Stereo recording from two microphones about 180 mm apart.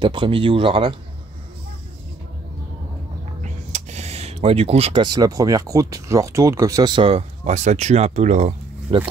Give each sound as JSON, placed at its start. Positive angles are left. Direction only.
{"t": 0.0, "sound": "speech", "side_deg": -25}
{"t": 3.7, "sound": "speech", "side_deg": -40}
{"t": 8.9, "sound": "speech", "side_deg": -30}